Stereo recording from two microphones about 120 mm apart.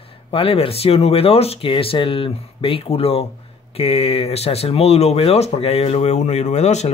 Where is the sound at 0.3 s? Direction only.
50° left (ahead or behind).